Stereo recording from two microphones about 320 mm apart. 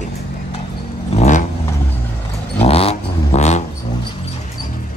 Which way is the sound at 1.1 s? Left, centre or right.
Left.